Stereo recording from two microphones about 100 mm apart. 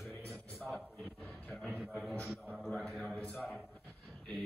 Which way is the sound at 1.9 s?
5° left (ahead or behind).